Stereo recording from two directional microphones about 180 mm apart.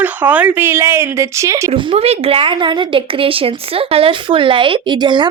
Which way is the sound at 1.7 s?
30° right (ahead or behind).